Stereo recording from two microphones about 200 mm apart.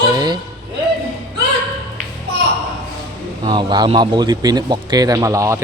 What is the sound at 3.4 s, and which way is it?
Speech, 20° right (ahead or behind).